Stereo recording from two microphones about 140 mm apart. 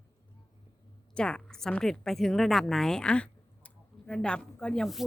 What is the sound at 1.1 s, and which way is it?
A woman's voice, 5° left (ahead or behind).